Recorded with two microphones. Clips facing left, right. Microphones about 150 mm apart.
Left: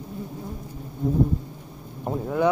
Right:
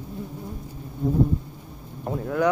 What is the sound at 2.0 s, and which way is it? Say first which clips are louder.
Speech: left 1 dB; 15° left (ahead or behind).